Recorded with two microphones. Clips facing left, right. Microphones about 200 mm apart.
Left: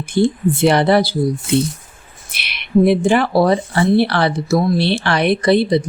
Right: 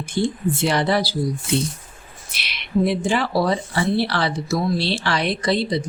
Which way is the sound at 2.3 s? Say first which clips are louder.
Left 7 dB; 60° left (ahead or behind).